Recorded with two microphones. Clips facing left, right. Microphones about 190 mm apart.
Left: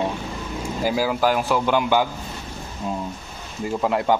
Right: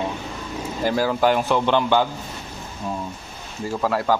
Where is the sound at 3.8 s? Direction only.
20° left (ahead or behind).